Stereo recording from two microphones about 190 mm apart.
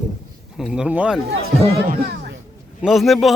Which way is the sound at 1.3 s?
90° right.